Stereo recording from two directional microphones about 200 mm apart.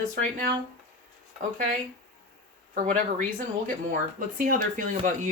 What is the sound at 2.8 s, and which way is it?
Speech, 40° right (ahead or behind).